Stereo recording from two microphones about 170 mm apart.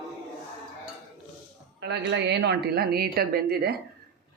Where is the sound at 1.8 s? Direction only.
90° right; by 3.7 s 65° right (ahead or behind).